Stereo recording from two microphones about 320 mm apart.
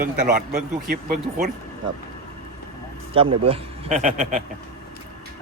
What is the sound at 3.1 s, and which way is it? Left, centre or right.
A man's voice, centre.